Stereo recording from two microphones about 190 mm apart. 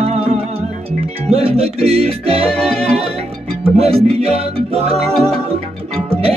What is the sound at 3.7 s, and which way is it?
Music, 30° right (ahead or behind).